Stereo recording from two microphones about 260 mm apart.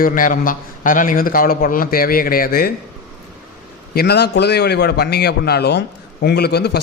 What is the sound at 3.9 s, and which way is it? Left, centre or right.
A man's voice, left.